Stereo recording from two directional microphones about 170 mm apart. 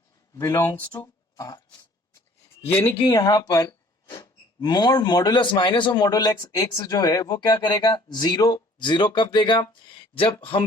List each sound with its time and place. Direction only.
0.3 s speech: 15° left (ahead or behind)
2.6 s a man's voice: 10° left (ahead or behind)
3.1 s speech: 25° left (ahead or behind)